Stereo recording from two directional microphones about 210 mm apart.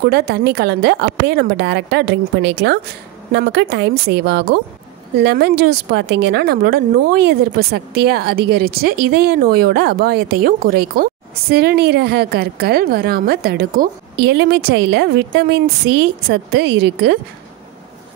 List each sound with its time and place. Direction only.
0.0 s a woman's voice: 50° right (ahead or behind)